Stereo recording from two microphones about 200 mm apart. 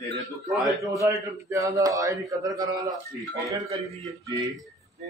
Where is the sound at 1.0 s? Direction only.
15° right (ahead or behind).